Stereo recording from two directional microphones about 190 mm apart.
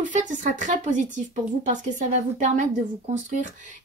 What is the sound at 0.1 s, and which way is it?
Speech, 40° right (ahead or behind).